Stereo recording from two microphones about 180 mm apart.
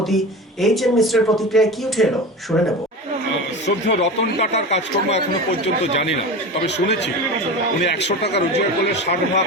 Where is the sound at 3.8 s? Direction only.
75° left (ahead or behind).